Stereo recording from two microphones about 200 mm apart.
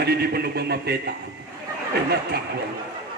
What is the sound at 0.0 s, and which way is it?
A man's voice, 50° right (ahead or behind).